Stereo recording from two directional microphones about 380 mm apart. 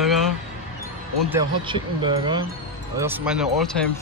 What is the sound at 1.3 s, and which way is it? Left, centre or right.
Speech, centre.